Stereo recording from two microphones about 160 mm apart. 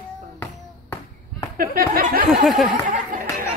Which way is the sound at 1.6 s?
65° right (ahead or behind).